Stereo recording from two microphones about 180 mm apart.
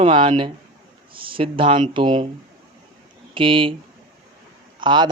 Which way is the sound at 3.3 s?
30° right (ahead or behind).